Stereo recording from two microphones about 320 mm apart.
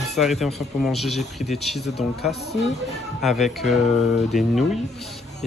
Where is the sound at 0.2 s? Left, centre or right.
Centre.